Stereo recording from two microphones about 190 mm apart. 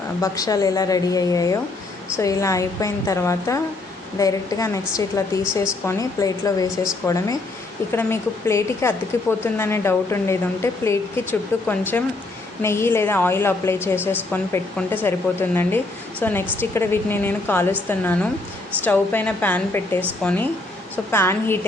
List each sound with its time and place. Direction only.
0.2 s a woman's voice: 20° left (ahead or behind)